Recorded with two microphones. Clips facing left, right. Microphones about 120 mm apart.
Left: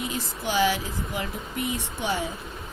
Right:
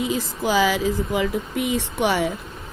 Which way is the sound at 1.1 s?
90° right.